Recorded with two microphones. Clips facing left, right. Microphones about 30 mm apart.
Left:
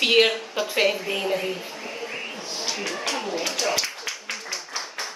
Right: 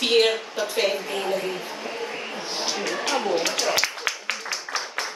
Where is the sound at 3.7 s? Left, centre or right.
Right.